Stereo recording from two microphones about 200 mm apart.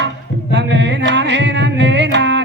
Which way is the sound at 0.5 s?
60° right (ahead or behind).